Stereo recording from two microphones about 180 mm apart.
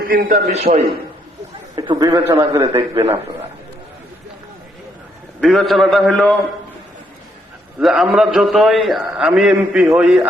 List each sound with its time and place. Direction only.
0.0 s a man's voice: 55° right (ahead or behind); by 0.9 s 35° right (ahead or behind)
1.7 s a man's voice: 20° right (ahead or behind)
5.4 s a man's voice: centre (ahead or behind)
7.8 s a man's voice: centre (ahead or behind)